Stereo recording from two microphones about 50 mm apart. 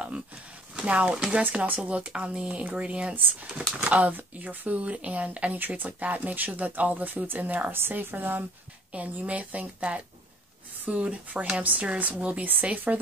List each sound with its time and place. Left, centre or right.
0.8 s speech: right
7.7 s speech: right
8.9 s speech: right